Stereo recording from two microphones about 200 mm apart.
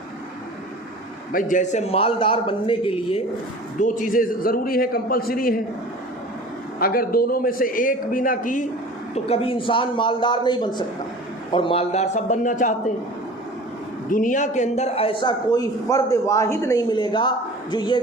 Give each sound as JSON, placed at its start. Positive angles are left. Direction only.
{"t": 1.3, "sound": "a man's voice", "side_deg": 40}
{"t": 3.8, "sound": "a man's voice", "side_deg": 40}
{"t": 6.7, "sound": "a man's voice", "side_deg": 45}
{"t": 9.1, "sound": "a man's voice", "side_deg": 30}
{"t": 14.1, "sound": "a man's voice", "side_deg": 40}